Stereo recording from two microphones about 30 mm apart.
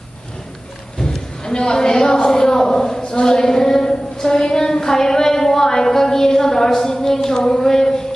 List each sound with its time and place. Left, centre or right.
1.5 s a woman's voice: left
3.1 s child singing: left